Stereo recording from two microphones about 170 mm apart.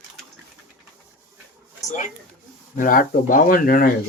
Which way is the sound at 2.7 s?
50° left (ahead or behind).